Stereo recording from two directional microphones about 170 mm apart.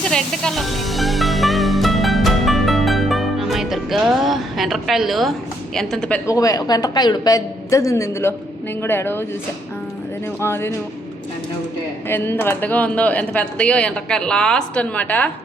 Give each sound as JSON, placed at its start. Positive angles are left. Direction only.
{"t": 0.1, "sound": "music", "side_deg": 0}
{"t": 5.7, "sound": "a woman's voice", "side_deg": 5}
{"t": 6.2, "sound": "a woman's voice", "side_deg": 20}
{"t": 10.4, "sound": "speech", "side_deg": 15}
{"t": 12.0, "sound": "speech", "side_deg": 15}